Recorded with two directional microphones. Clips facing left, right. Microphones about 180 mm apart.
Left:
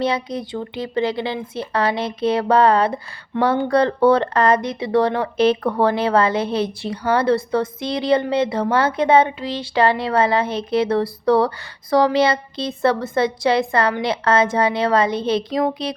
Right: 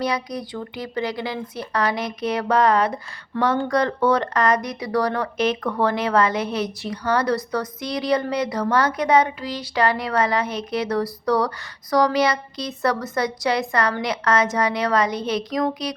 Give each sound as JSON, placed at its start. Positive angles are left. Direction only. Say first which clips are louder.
{"t": 0.0, "sound": "speech", "louder": "left 3 dB", "side_deg": 25}